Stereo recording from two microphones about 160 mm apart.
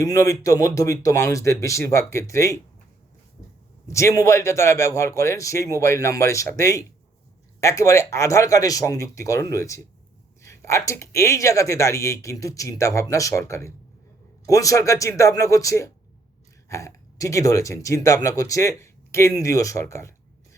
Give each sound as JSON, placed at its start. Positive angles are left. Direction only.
{"t": 0.0, "sound": "speech", "side_deg": 20}
{"t": 3.8, "sound": "a man's voice", "side_deg": 20}